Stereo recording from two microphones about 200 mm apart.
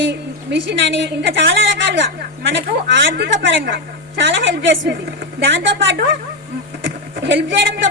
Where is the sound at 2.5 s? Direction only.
60° right (ahead or behind).